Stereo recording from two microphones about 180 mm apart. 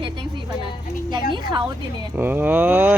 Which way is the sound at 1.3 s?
25° right (ahead or behind).